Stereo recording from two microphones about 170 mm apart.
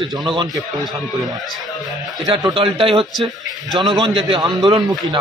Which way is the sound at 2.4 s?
25° right (ahead or behind).